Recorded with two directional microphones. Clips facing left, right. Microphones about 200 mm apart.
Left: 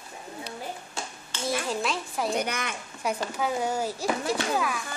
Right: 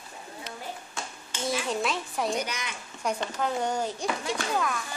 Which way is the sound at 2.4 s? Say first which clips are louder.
Left 3 dB; 55° left (ahead or behind).